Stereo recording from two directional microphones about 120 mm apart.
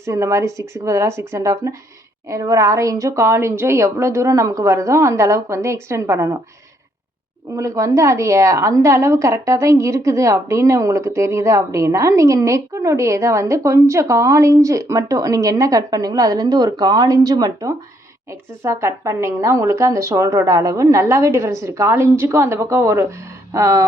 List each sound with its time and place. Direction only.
0.0 s a woman's voice: 25° right (ahead or behind)
7.5 s a woman's voice: 25° right (ahead or behind)